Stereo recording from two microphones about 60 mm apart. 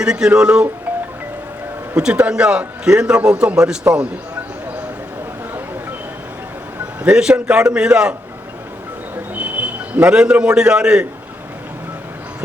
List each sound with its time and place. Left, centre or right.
0.0 s a man's voice: centre
2.2 s a man's voice: centre
7.0 s a man's voice: centre
9.3 s a man's voice: right